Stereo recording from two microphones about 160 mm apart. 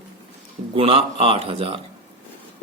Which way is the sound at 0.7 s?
35° right (ahead or behind).